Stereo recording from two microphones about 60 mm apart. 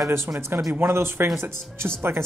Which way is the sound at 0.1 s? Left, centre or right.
Right.